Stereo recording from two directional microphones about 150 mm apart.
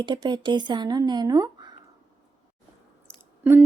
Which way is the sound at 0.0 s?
30° right (ahead or behind).